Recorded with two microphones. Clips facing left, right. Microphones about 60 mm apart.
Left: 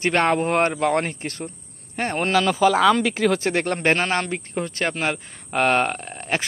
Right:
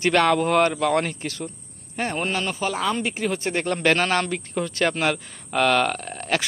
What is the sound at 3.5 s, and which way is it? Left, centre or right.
Speech, left.